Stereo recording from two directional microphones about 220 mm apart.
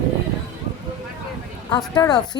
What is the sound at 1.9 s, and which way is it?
Speech, 20° left (ahead or behind).